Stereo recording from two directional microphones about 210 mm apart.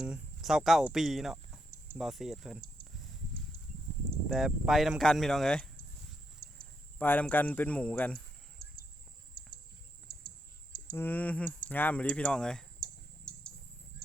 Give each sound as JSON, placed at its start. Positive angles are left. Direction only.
{"t": 0.0, "sound": "speech", "side_deg": 0}
{"t": 2.8, "sound": "a sound", "side_deg": -20}
{"t": 4.3, "sound": "speech", "side_deg": 0}
{"t": 7.0, "sound": "speech", "side_deg": 10}
{"t": 10.1, "sound": "clicking", "side_deg": -45}
{"t": 10.9, "sound": "speech", "side_deg": 10}
{"t": 13.3, "sound": "a sound", "side_deg": 5}